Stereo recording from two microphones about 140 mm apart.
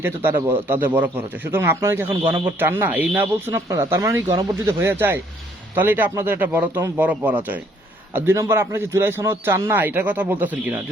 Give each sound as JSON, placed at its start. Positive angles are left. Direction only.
{"t": 0.0, "sound": "a man's voice", "side_deg": -15}